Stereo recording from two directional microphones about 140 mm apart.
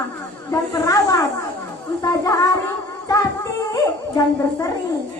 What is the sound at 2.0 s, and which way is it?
Music, 20° left (ahead or behind).